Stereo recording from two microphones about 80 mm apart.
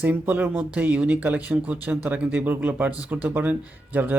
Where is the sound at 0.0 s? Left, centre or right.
Right.